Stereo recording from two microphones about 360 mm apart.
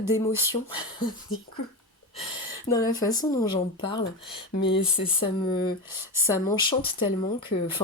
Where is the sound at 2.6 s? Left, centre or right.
Centre.